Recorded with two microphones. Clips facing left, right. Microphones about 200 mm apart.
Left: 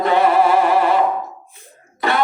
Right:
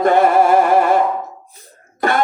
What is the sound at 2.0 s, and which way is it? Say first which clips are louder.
Cough: right 2 dB; 50° right (ahead or behind).